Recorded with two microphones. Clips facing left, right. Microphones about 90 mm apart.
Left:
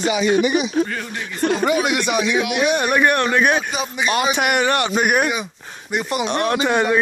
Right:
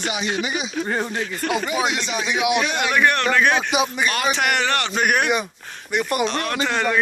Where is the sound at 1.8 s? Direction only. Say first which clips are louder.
Left 5 dB; 60° left (ahead or behind).